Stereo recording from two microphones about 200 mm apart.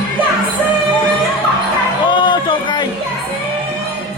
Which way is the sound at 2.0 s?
25° left (ahead or behind).